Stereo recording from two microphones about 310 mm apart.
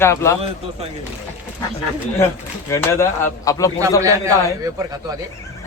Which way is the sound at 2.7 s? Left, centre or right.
Centre.